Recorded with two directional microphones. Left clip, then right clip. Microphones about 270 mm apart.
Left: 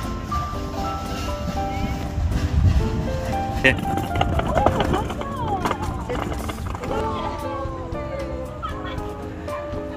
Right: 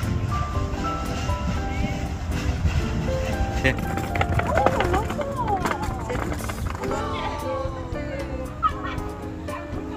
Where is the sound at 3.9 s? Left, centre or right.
Left.